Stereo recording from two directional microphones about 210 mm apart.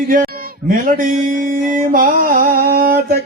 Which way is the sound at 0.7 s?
40° right (ahead or behind).